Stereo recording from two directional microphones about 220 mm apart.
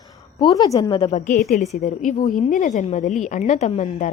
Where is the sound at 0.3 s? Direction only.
20° left (ahead or behind).